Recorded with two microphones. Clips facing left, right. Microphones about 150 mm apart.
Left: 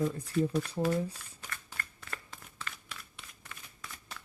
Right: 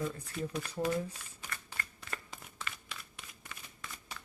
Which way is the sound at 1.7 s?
5° right (ahead or behind).